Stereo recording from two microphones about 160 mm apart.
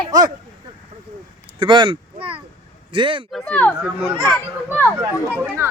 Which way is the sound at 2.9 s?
30° right (ahead or behind).